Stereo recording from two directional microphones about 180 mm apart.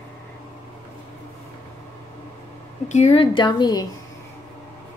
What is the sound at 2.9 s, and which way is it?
A woman's voice, 35° left (ahead or behind).